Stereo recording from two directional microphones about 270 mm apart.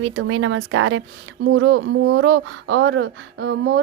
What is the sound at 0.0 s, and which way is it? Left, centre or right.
A woman's voice, right.